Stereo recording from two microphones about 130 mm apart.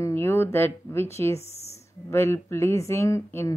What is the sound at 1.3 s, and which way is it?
Speech, 55° left (ahead or behind).